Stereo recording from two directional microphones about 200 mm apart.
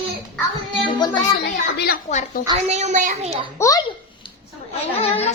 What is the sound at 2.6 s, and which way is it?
Speech, 35° right (ahead or behind).